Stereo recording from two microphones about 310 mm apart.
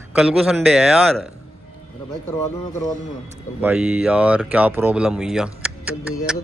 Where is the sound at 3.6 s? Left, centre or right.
Centre.